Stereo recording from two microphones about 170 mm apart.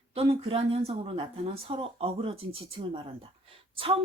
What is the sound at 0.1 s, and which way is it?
A woman's voice, 35° right (ahead or behind).